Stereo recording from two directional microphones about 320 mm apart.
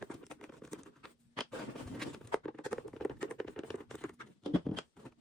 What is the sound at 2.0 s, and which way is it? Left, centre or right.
Patter, centre.